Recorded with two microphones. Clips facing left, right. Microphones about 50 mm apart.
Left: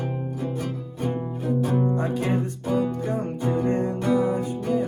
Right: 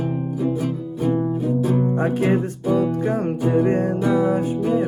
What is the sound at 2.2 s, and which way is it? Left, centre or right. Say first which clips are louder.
Music: right 6 dB; centre.